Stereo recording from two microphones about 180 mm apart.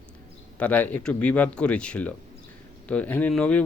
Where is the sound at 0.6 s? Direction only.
10° left (ahead or behind).